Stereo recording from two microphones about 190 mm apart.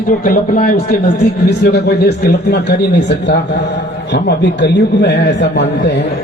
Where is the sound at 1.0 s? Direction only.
60° left (ahead or behind).